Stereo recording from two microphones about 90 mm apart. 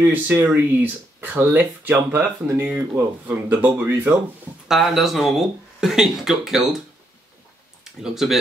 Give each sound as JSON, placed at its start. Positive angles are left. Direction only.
{"t": 0.1, "sound": "speech", "side_deg": -25}
{"t": 4.6, "sound": "speech", "side_deg": -5}
{"t": 7.8, "sound": "speech", "side_deg": -5}